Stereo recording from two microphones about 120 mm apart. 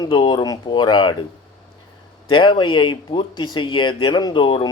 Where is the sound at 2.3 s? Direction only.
40° left (ahead or behind).